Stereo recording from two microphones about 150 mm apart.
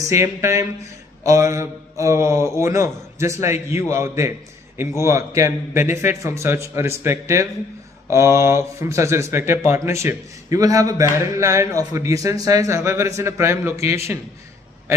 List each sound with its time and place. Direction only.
0.0 s a man's voice: 20° right (ahead or behind)